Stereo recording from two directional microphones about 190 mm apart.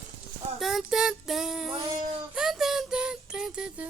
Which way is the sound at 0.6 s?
Centre (ahead or behind).